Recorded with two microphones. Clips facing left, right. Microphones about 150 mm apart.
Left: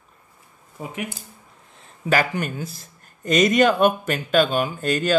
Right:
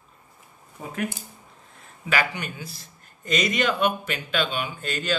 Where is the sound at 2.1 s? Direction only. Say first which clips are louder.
Left 5 dB; 45° left (ahead or behind).